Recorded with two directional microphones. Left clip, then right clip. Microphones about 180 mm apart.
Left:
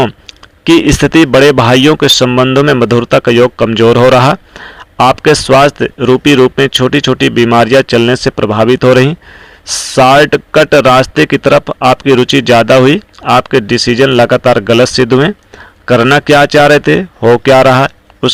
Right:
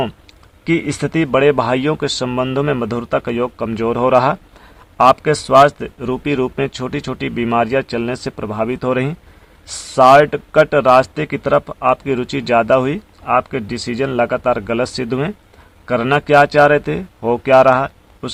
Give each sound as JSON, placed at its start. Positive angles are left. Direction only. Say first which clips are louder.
{"t": 0.9, "sound": "a man's voice", "louder": "left 11 dB", "side_deg": 30}